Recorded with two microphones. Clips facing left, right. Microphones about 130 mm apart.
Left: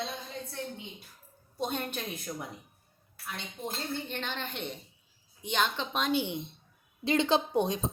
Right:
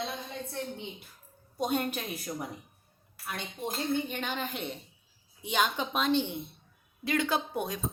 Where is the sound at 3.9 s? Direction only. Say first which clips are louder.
Right 5 dB; 10° right (ahead or behind).